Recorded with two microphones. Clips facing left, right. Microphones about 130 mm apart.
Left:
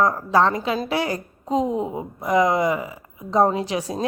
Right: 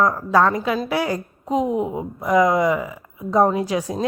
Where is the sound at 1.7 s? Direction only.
15° right (ahead or behind).